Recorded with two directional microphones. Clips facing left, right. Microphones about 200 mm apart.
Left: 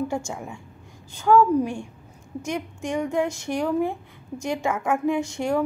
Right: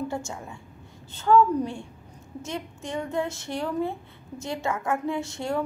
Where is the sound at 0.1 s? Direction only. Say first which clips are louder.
Left 4 dB; 15° left (ahead or behind).